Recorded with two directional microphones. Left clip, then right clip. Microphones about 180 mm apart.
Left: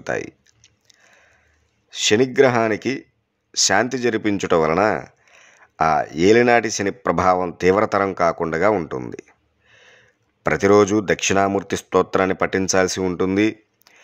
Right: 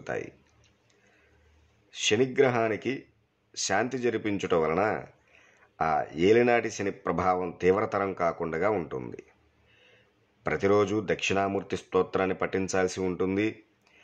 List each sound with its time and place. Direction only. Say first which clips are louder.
0.0 s clicking: left 9 dB; 35° left (ahead or behind)
1.9 s speech: left 8 dB; 40° left (ahead or behind)